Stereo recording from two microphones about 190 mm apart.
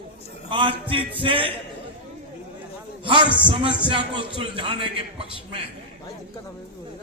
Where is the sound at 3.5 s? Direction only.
25° right (ahead or behind).